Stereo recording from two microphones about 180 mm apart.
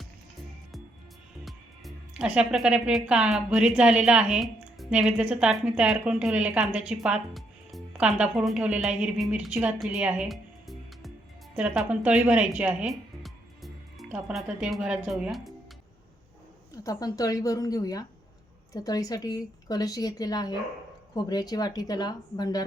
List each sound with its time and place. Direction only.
1.5 s speech: centre (ahead or behind)
16.8 s a woman's voice: 20° left (ahead or behind)